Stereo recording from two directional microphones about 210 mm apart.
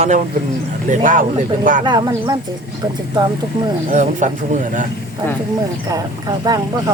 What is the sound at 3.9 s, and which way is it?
Speech, 35° right (ahead or behind).